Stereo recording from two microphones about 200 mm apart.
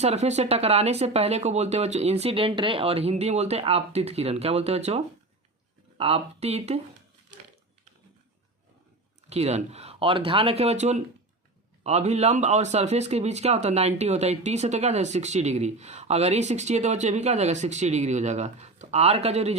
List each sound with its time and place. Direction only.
0.0 s speech: 35° right (ahead or behind)
9.3 s speech: 35° right (ahead or behind)